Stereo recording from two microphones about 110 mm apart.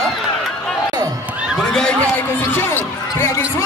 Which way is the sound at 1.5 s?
5° left (ahead or behind).